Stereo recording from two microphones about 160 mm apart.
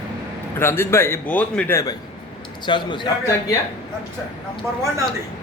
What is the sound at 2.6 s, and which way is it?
Speech, 30° left (ahead or behind).